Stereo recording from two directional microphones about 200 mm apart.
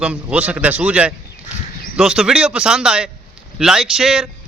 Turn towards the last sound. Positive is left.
turn(degrees=0)  # may be behind; listen again after turning